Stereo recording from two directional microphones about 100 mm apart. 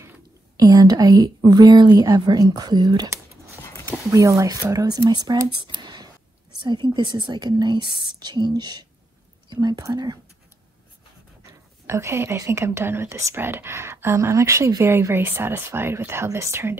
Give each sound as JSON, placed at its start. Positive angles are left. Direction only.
{"t": 0.7, "sound": "speech", "side_deg": -40}
{"t": 4.1, "sound": "speech", "side_deg": -30}
{"t": 11.8, "sound": "speech", "side_deg": -25}